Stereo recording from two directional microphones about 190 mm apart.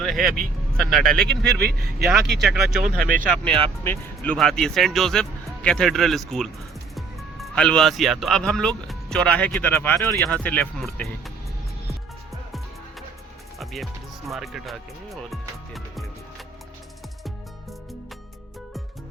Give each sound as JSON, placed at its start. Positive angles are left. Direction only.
{"t": 0.0, "sound": "vehicle", "side_deg": 0}
{"t": 0.8, "sound": "speech", "side_deg": 0}
{"t": 1.6, "sound": "speech", "side_deg": -55}
{"t": 2.4, "sound": "speech", "side_deg": 0}
{"t": 14.3, "sound": "speech", "side_deg": 0}